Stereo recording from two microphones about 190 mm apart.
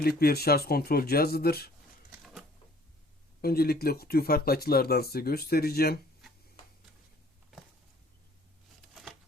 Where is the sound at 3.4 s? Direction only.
55° left (ahead or behind).